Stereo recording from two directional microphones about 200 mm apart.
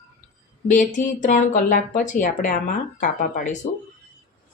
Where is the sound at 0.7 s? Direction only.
40° left (ahead or behind).